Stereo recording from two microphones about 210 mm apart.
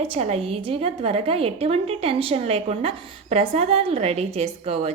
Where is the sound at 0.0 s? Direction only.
30° right (ahead or behind).